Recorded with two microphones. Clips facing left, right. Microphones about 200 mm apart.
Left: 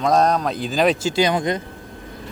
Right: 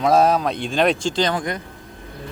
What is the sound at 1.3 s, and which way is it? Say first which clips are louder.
Speech: left 4 dB; 20° left (ahead or behind).